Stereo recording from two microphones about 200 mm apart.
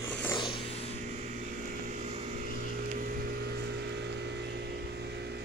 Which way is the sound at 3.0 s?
45° right (ahead or behind).